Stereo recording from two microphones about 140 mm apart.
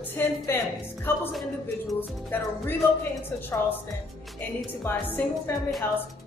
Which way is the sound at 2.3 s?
15° left (ahead or behind).